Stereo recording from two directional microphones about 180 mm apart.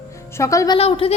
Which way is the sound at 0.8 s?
30° left (ahead or behind).